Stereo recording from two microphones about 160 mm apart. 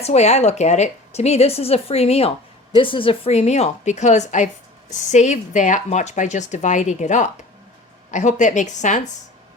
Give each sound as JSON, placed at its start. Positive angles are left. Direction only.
{"t": 0.0, "sound": "speech", "side_deg": 45}